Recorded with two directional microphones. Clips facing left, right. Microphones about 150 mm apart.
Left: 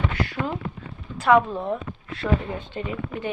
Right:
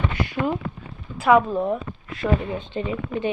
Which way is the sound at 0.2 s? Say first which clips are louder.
Right 3 dB; 20° right (ahead or behind).